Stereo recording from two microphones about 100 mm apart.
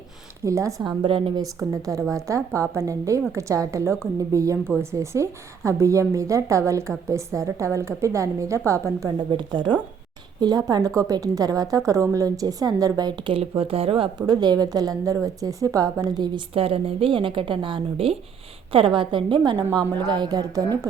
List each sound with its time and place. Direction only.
0.4 s a woman's voice: 30° right (ahead or behind)
0.9 s a woman's voice: 60° right (ahead or behind)
1.7 s a woman's voice: 35° right (ahead or behind)
9.3 s a woman's voice: 50° right (ahead or behind)
13.6 s speech: 70° right (ahead or behind)
14.2 s a woman's voice: 45° right (ahead or behind)
16.6 s a woman's voice: 70° right (ahead or behind)
18.7 s a woman's voice: 55° right (ahead or behind); by 20.7 s 40° right (ahead or behind)